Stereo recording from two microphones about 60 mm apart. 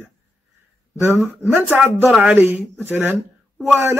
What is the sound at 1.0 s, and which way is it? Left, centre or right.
Speech, right.